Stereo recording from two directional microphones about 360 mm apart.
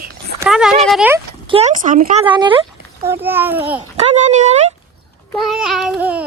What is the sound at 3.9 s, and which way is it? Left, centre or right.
Speech, centre.